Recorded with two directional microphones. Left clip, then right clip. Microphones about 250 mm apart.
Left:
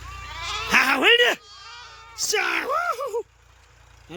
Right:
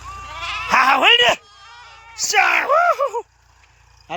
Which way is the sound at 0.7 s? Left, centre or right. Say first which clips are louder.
Right 4 dB; centre.